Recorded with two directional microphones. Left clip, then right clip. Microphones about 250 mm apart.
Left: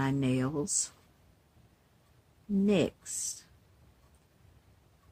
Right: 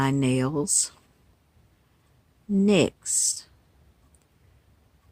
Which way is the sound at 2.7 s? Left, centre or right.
Right.